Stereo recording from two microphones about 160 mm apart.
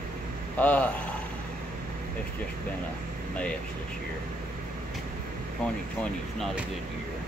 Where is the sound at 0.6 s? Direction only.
10° left (ahead or behind).